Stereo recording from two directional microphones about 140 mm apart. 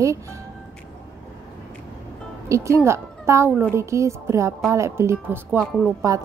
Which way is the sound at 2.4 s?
20° right (ahead or behind).